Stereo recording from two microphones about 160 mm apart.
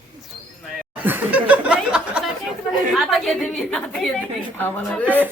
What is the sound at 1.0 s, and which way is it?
Laughter, 10° right (ahead or behind).